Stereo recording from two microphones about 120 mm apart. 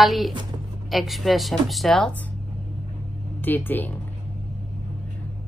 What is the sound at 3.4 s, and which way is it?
Speech, 15° left (ahead or behind).